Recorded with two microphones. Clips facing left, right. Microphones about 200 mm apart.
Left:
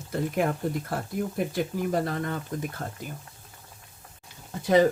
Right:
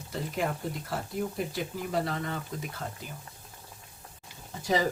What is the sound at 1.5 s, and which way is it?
Speech, 50° left (ahead or behind).